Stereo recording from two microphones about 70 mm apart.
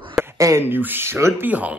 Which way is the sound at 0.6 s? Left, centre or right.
Right.